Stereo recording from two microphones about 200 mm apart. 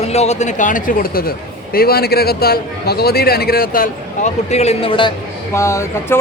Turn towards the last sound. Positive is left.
turn(degrees=15)  # may be behind; listen again after turning